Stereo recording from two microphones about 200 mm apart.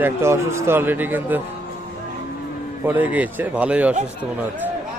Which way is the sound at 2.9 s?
10° right (ahead or behind).